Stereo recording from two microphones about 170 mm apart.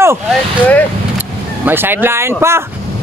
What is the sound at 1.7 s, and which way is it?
Speech, 10° right (ahead or behind).